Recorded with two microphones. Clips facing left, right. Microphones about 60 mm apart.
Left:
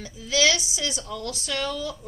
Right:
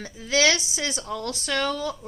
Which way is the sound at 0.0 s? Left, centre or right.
Right.